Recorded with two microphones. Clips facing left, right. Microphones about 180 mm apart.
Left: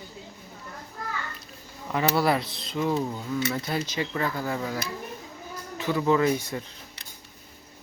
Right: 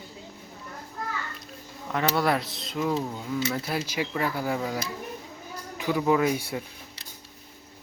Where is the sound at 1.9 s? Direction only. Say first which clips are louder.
Left 1 dB; centre (ahead or behind).